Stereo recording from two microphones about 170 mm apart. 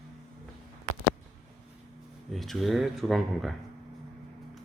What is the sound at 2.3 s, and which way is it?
Speech, centre (ahead or behind).